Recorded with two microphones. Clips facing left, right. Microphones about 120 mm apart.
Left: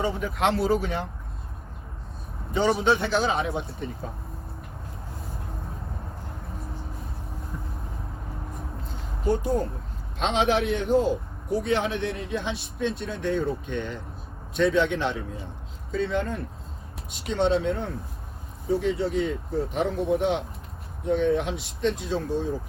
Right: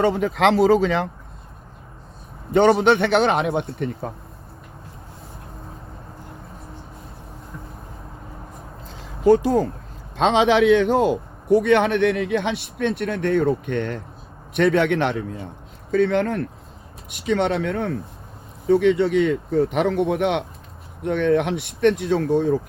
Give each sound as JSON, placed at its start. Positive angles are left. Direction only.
{"t": 0.0, "sound": "speech", "side_deg": -85}
{"t": 2.5, "sound": "speech", "side_deg": -65}
{"t": 9.0, "sound": "a sound", "side_deg": -90}
{"t": 10.2, "sound": "a man's voice", "side_deg": -90}